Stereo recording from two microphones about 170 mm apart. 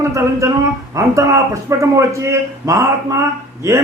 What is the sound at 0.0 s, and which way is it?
A man's voice, 15° right (ahead or behind).